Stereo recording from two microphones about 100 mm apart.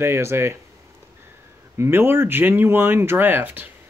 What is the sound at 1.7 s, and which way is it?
Speech, 25° right (ahead or behind).